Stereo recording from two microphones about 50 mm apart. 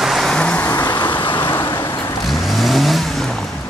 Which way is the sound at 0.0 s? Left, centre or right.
Centre.